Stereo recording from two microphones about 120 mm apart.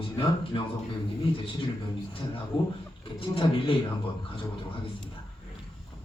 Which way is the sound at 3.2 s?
45° left (ahead or behind).